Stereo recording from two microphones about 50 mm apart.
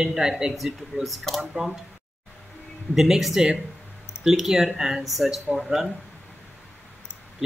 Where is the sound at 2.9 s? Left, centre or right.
Centre.